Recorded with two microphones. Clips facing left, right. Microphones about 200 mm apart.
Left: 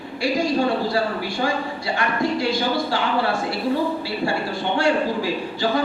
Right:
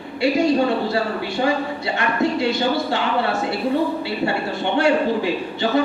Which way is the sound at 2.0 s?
25° right (ahead or behind).